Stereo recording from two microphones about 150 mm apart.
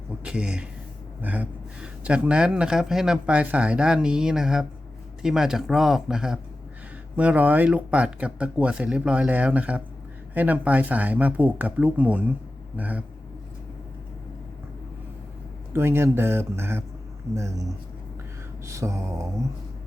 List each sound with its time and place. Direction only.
0.3 s speech: 5° right (ahead or behind)
15.7 s speech: 15° right (ahead or behind)
17.3 s mantra: 20° right (ahead or behind)